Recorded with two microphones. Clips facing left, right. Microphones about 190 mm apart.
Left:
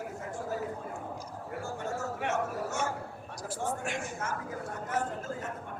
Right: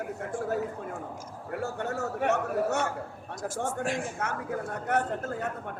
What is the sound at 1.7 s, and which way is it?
Speech, 65° right (ahead or behind).